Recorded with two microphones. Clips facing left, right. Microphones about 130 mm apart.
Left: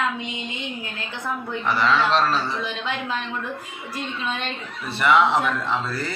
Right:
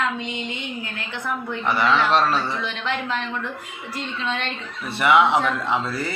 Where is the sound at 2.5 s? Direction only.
15° left (ahead or behind).